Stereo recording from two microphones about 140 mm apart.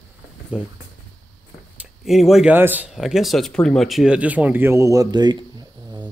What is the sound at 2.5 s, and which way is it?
Speech, 15° right (ahead or behind).